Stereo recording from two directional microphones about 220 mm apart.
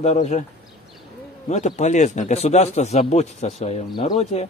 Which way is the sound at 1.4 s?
30° left (ahead or behind).